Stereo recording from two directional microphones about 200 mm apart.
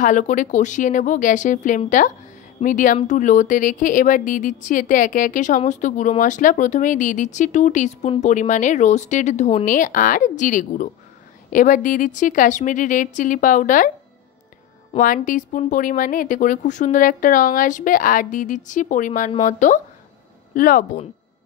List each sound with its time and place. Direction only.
0.0 s speech: 40° left (ahead or behind)
14.9 s speech: 40° left (ahead or behind)